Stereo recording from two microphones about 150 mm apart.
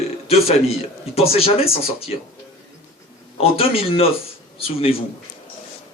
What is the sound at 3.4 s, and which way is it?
Speech, 40° left (ahead or behind).